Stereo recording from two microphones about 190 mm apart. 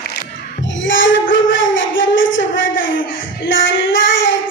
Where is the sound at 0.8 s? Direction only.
80° left.